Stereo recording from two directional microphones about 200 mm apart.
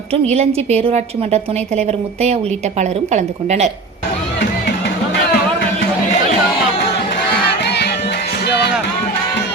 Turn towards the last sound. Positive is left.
turn(degrees=55)  # may be behind; listen again after turning